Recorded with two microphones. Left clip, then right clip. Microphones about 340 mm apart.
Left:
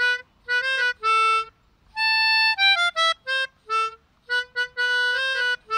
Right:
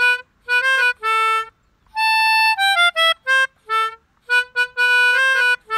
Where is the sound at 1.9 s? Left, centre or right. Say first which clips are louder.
Right 4 dB; right.